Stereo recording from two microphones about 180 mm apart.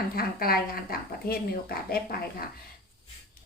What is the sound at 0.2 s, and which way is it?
A woman's voice, 55° left (ahead or behind).